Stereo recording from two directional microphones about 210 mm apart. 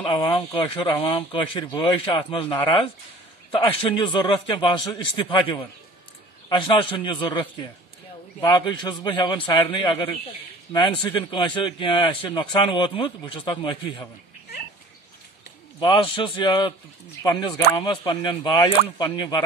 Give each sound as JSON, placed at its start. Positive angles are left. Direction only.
{"t": 0.0, "sound": "a man's voice", "side_deg": 25}
{"t": 8.4, "sound": "a man's voice", "side_deg": 20}
{"t": 15.8, "sound": "a man's voice", "side_deg": 25}